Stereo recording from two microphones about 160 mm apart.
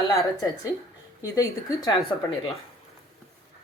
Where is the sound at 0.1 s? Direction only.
20° left (ahead or behind).